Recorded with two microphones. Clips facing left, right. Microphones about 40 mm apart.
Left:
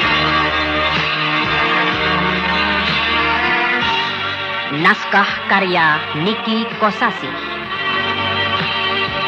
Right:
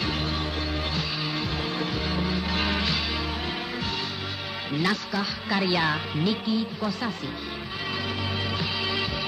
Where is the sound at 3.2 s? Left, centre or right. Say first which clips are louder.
Left 16 dB; left.